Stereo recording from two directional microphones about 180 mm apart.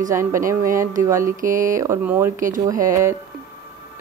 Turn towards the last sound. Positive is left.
turn(degrees=-15)  # may be behind; listen again after turning